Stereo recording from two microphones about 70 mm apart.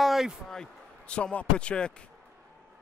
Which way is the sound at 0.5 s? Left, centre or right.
Centre.